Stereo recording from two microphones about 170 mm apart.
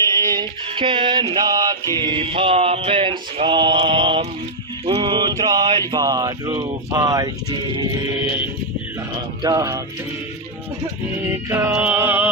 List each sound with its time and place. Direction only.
0.3 s music: 30° right (ahead or behind)
4.9 s a sound: 25° right (ahead or behind)
5.9 s speech: 25° right (ahead or behind)
9.4 s music: 20° right (ahead or behind)
11.3 s music: 15° right (ahead or behind)